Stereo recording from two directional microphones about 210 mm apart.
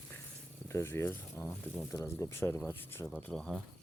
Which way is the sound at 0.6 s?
10° left (ahead or behind).